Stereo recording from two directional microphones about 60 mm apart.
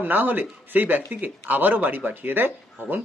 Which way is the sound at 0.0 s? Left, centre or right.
Right.